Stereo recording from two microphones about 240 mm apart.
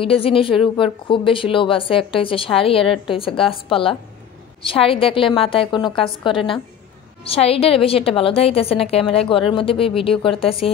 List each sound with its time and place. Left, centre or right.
0.0 s a woman's voice: left